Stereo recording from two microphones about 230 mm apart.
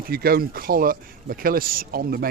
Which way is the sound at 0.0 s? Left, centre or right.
Right.